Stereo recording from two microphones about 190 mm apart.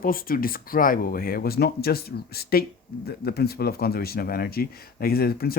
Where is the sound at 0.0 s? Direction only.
50° left (ahead or behind).